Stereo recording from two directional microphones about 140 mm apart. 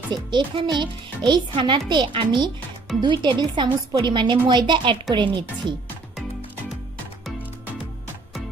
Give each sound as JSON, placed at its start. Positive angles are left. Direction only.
{"t": 0.1, "sound": "a woman's voice", "side_deg": -35}